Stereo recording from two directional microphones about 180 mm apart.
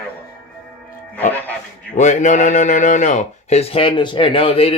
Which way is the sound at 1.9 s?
40° left (ahead or behind).